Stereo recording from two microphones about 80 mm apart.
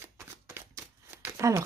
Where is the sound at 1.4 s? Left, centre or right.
Right.